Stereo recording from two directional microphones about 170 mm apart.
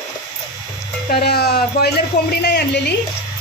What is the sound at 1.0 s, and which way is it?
Speech, 65° left (ahead or behind).